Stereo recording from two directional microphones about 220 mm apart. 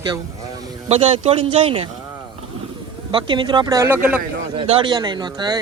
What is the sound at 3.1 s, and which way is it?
Speech, 20° right (ahead or behind).